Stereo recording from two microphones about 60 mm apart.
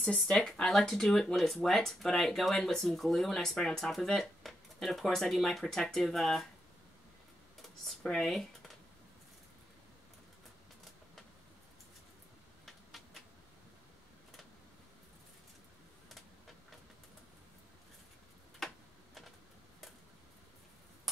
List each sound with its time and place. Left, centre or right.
0.3 s speech: centre
7.8 s speech: centre
12.6 s a sound: centre
18.6 s tick-tock: centre